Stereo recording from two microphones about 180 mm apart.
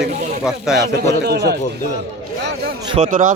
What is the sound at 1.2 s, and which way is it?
Speech, 65° right (ahead or behind).